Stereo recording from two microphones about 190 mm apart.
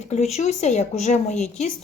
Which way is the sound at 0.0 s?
35° left (ahead or behind).